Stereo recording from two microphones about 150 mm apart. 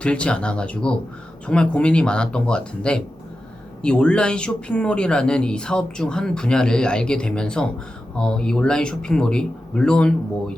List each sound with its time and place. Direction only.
0.0 s speech: 5° left (ahead or behind)